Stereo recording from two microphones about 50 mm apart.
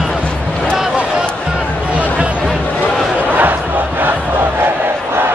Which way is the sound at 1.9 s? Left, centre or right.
Right.